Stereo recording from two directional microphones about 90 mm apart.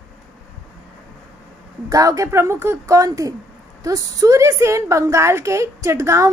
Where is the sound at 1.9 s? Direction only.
40° right (ahead or behind).